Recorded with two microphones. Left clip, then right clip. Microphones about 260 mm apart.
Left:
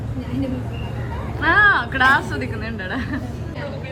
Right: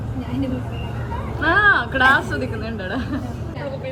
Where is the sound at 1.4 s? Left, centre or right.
Centre.